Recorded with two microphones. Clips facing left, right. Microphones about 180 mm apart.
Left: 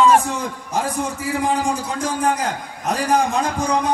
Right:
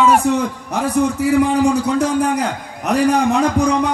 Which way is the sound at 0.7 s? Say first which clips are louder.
Right 6 dB; 65° right (ahead or behind).